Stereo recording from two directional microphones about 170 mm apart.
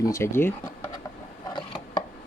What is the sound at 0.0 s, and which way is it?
Speech, 15° left (ahead or behind).